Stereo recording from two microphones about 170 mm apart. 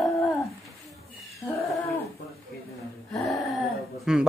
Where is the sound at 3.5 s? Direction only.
Centre (ahead or behind).